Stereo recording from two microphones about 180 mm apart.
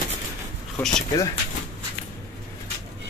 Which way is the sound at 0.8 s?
10° left (ahead or behind).